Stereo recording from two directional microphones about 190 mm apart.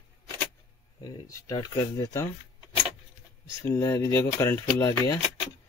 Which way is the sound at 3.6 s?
15° left (ahead or behind).